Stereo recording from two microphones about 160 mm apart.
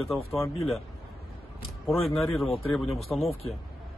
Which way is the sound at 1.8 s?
Centre (ahead or behind).